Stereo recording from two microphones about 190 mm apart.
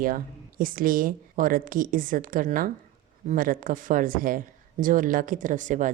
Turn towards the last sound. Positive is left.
turn(degrees=-40)  # may be behind; listen again after turning